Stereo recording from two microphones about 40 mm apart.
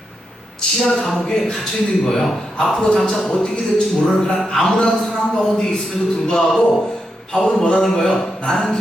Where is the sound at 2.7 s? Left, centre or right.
Centre.